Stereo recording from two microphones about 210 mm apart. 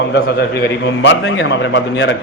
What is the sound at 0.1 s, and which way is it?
A man's voice, 50° left (ahead or behind).